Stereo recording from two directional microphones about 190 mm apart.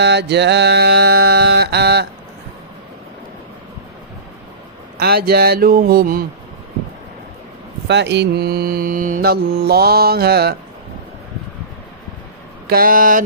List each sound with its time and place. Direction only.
0.0 s mantra: 65° right (ahead or behind)
4.9 s speech: 55° right (ahead or behind)
7.9 s mantra: 65° right (ahead or behind)
12.6 s speech: 50° right (ahead or behind)